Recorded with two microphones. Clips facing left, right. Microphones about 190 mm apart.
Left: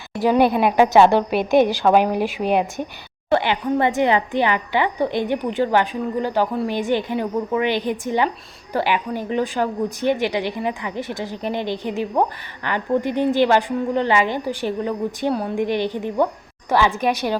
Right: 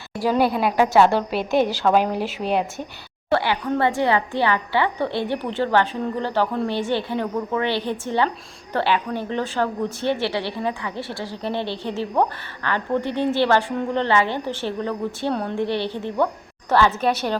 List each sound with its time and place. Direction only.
0.2 s a woman's voice: 20° left (ahead or behind)